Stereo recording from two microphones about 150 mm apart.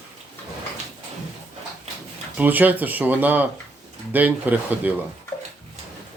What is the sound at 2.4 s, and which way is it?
Speech, 10° right (ahead or behind).